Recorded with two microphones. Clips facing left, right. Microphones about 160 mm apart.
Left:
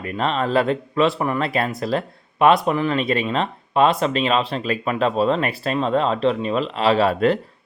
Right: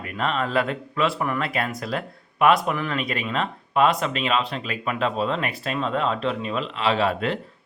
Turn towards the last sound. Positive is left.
turn(degrees=40)  # may be behind; listen again after turning